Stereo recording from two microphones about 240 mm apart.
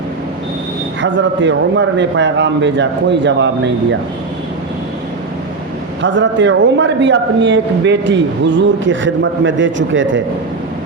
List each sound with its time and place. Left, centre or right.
1.0 s a man's voice: right
6.0 s a man's voice: right